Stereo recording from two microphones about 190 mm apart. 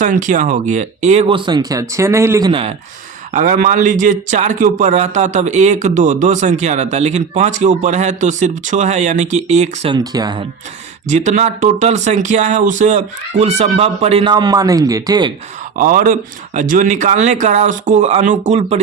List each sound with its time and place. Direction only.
0.0 s a man's voice: 40° right (ahead or behind); by 2.5 s 15° right (ahead or behind)
2.5 s speech: 30° right (ahead or behind)
3.3 s a man's voice: 45° right (ahead or behind)
9.9 s speech: 20° right (ahead or behind)
11.1 s a man's voice: 35° right (ahead or behind); by 15.3 s 20° right (ahead or behind)
15.7 s a man's voice: 45° right (ahead or behind)